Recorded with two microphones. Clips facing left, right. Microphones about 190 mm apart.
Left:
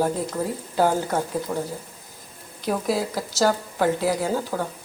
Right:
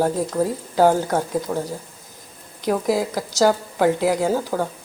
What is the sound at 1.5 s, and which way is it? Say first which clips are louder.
Speech: right 2 dB; 5° right (ahead or behind).